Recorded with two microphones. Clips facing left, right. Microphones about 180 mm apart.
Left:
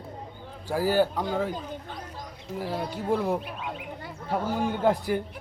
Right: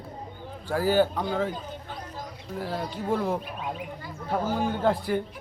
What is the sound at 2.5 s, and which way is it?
Speech, 10° left (ahead or behind).